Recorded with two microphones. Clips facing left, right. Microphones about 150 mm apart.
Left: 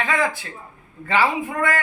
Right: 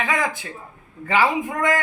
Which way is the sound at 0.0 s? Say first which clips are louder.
Left 1 dB; 15° right (ahead or behind).